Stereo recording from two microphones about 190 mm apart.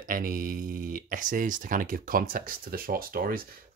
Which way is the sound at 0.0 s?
45° right (ahead or behind).